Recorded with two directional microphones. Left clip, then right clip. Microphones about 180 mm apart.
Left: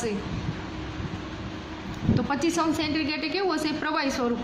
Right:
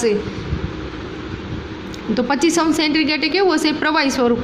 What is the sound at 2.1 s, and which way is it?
A woman's voice, 30° right (ahead or behind).